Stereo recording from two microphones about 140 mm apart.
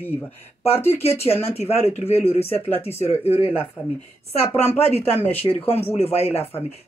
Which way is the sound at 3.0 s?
45° left (ahead or behind).